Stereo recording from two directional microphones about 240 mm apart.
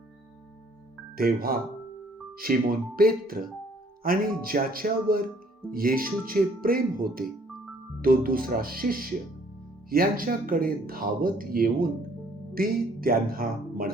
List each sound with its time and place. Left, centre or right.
1.1 s speech: right